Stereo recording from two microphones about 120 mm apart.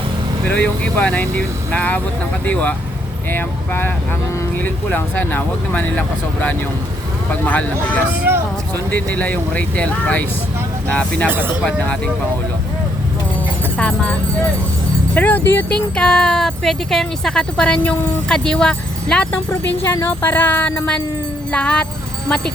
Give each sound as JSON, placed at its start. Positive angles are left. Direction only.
{"t": 0.4, "sound": "speech", "side_deg": 10}
{"t": 8.3, "sound": "speech", "side_deg": -20}
{"t": 8.7, "sound": "speech", "side_deg": 15}
{"t": 11.3, "sound": "speech", "side_deg": -15}
{"t": 11.6, "sound": "speech", "side_deg": 5}
{"t": 13.7, "sound": "speech", "side_deg": 10}